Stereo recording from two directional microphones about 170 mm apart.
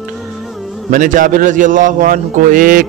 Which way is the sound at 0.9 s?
50° right (ahead or behind).